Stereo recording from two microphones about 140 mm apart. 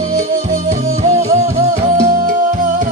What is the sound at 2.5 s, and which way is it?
Music, 70° right (ahead or behind).